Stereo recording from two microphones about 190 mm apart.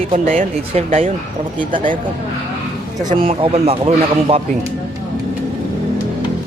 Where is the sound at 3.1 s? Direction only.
30° right (ahead or behind).